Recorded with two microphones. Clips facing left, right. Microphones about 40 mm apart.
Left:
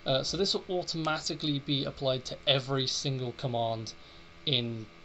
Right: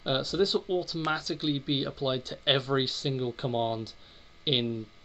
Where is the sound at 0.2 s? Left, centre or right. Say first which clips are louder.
Right 4 dB; right.